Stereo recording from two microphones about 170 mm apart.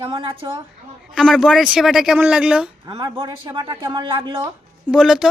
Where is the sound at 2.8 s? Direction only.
30° right (ahead or behind).